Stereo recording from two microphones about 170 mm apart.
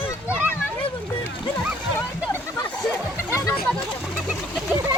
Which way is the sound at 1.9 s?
10° left (ahead or behind).